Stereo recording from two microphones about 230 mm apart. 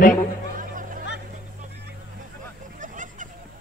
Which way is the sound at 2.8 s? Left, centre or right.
Right.